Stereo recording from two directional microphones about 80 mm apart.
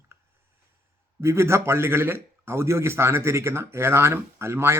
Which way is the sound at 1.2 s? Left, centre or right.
Right.